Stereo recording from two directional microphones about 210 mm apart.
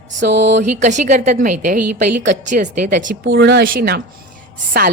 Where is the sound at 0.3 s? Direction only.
55° right (ahead or behind).